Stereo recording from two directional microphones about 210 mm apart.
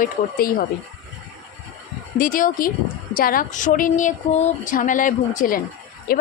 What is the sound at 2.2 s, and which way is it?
A woman's voice, 40° left (ahead or behind).